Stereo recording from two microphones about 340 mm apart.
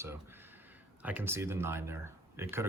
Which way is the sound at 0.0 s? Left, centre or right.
Centre.